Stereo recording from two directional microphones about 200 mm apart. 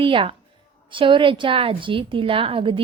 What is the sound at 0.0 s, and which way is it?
A woman's voice, 25° right (ahead or behind).